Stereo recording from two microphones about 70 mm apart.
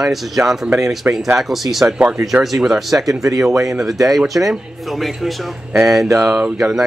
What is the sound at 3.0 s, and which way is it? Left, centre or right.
Speech, right.